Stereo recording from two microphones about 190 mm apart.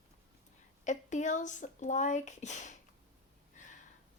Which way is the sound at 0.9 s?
40° left (ahead or behind).